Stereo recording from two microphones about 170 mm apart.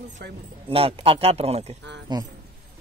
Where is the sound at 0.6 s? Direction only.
35° right (ahead or behind).